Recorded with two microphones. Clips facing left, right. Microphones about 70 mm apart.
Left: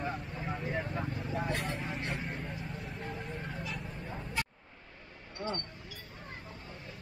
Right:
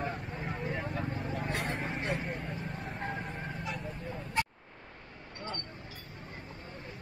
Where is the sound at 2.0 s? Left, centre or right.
Centre.